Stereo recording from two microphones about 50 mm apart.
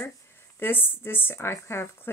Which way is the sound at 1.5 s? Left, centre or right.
Left.